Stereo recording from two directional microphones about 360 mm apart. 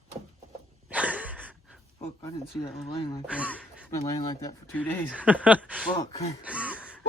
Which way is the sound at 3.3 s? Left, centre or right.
Centre.